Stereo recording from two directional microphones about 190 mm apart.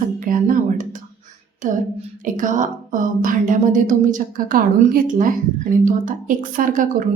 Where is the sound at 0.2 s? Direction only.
45° right (ahead or behind).